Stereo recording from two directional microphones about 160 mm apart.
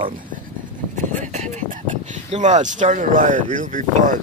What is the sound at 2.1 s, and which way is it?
Speech, 50° right (ahead or behind).